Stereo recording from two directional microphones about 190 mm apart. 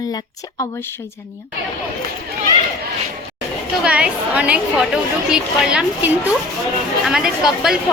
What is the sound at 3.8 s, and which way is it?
A woman's voice, 5° right (ahead or behind).